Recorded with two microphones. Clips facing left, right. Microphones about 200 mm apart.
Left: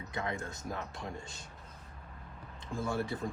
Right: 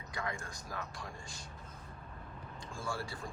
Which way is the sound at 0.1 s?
20° left (ahead or behind).